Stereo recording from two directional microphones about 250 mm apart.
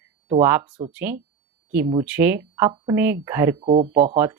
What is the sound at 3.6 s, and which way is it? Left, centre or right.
Speech, right.